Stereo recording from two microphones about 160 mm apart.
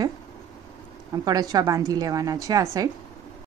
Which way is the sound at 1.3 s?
25° right (ahead or behind).